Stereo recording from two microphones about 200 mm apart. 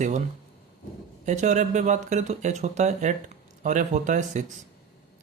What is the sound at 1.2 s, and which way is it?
Speech, 35° right (ahead or behind).